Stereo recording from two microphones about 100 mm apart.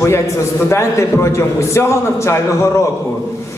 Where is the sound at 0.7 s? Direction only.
25° left (ahead or behind).